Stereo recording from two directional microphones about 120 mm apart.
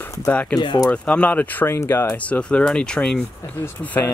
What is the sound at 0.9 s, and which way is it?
Speech, 10° left (ahead or behind).